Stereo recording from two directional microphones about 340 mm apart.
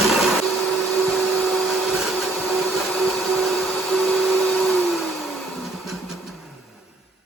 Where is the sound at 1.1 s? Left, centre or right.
Centre.